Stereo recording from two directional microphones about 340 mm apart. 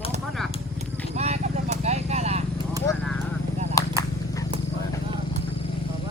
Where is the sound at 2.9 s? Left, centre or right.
Centre.